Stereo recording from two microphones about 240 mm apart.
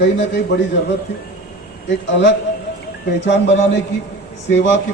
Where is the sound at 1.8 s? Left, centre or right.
Left.